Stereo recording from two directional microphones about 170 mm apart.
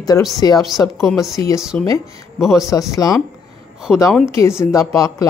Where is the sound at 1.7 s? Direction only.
10° left (ahead or behind).